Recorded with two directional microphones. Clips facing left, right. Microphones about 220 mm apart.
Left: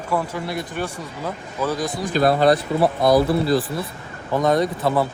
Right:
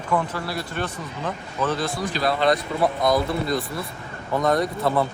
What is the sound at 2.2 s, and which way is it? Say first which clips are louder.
Speech: left 7 dB; 50° left (ahead or behind).